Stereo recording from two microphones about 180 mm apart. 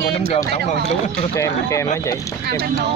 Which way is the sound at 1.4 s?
15° left (ahead or behind).